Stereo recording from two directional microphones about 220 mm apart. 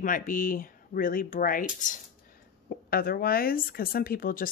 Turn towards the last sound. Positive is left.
turn(degrees=40)  # may be behind; listen again after turning